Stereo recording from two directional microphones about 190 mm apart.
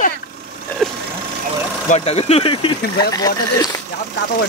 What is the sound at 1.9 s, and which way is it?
Speech, 30° left (ahead or behind).